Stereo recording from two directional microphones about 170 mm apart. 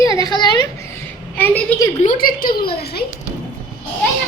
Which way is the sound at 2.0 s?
55° left (ahead or behind).